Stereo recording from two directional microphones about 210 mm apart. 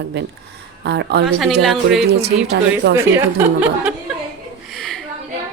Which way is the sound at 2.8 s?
55° right (ahead or behind).